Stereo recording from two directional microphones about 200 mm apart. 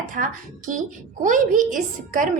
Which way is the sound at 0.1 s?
40° right (ahead or behind).